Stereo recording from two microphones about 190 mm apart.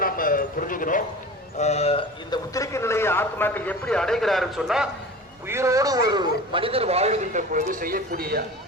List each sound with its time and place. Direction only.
0.0 s a sound: 50° left (ahead or behind)
1.5 s a man's voice: 35° left (ahead or behind); by 4.9 s centre (ahead or behind)
5.5 s a man's voice: 15° right (ahead or behind); by 8.4 s 50° right (ahead or behind)